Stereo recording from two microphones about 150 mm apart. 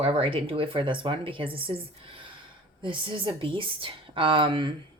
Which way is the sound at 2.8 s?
35° right (ahead or behind).